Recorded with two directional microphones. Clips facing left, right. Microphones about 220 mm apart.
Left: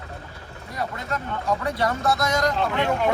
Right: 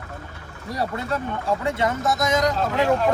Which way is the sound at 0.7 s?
35° right (ahead or behind).